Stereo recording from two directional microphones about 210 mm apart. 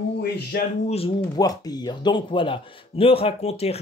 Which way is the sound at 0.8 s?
25° left (ahead or behind).